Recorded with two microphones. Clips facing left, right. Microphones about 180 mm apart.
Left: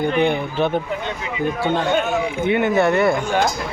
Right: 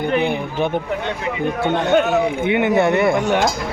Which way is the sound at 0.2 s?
5° right (ahead or behind).